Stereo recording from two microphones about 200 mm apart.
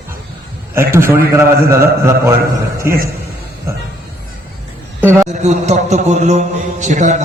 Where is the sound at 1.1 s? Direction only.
15° right (ahead or behind).